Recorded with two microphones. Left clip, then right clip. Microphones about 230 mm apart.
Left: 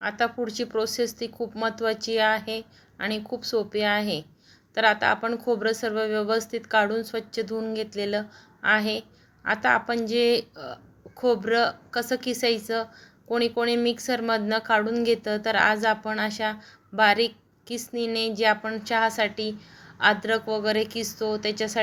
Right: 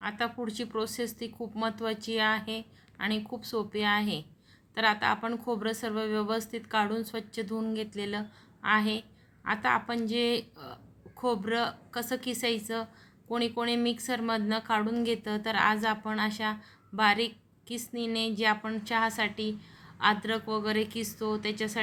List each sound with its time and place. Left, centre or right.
0.0 s a woman's voice: centre